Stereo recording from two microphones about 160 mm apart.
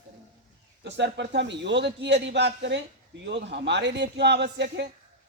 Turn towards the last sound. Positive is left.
turn(degrees=-90)